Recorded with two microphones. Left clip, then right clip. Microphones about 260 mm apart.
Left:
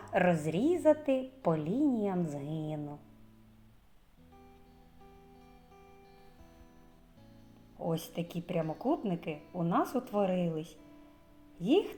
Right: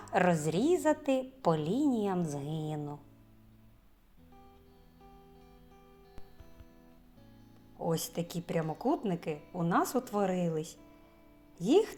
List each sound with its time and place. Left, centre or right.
0.0 s a woman's voice: right
7.8 s a woman's voice: right